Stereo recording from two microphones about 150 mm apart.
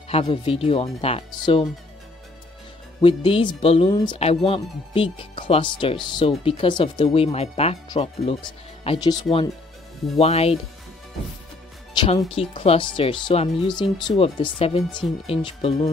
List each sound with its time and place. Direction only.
0.1 s speech: 40° left (ahead or behind)
3.0 s speech: 35° left (ahead or behind)
10.1 s speech: 45° left (ahead or behind)
11.9 s speech: 30° left (ahead or behind)
12.3 s speech: 40° left (ahead or behind)